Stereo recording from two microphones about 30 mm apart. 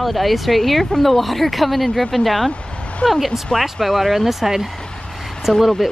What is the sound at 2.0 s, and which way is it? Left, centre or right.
Speech, left.